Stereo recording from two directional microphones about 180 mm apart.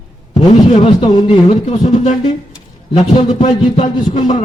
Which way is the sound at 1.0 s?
25° left (ahead or behind).